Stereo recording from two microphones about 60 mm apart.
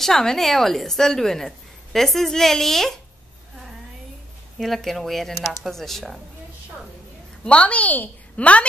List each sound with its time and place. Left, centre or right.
0.0 s a woman's voice: centre
4.6 s a woman's voice: centre
7.4 s a woman's voice: left